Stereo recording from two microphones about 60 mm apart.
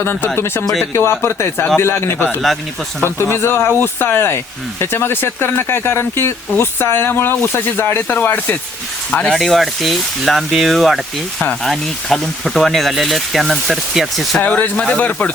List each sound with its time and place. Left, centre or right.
0.0 s speech: left
0.6 s speech: centre
0.9 s speech: left
9.1 s speech: centre
9.4 s speech: centre
14.4 s speech: left